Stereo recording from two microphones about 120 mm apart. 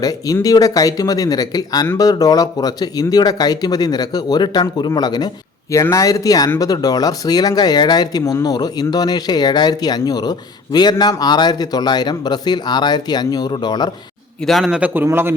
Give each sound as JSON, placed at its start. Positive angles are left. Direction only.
{"t": 0.0, "sound": "speech", "side_deg": 30}
{"t": 14.4, "sound": "a man's voice", "side_deg": 0}